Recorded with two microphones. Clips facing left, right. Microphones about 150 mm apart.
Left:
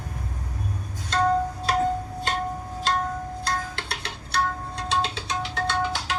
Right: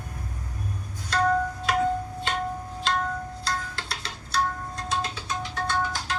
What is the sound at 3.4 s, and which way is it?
Music, 60° left (ahead or behind).